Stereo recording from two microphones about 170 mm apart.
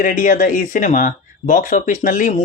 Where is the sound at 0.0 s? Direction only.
50° left (ahead or behind).